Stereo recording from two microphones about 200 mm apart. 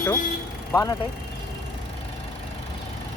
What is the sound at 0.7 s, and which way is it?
Speech, 15° left (ahead or behind).